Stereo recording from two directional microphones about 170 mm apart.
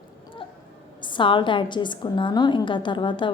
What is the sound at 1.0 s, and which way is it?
A woman's voice, 30° left (ahead or behind).